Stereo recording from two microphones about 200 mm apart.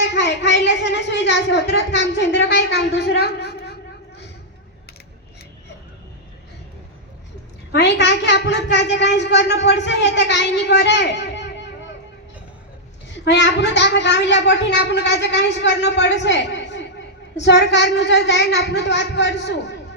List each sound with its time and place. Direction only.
0.0 s a woman's voice: 60° left (ahead or behind)
7.7 s a woman's voice: 60° left (ahead or behind)
13.1 s a woman's voice: 60° left (ahead or behind)